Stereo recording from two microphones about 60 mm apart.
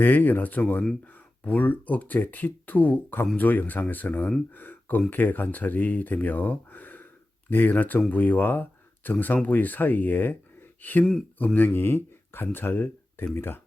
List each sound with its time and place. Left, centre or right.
0.0 s speech: left